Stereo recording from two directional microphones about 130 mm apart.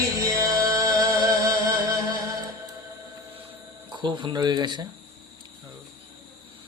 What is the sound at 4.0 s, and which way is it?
Speech, 35° right (ahead or behind).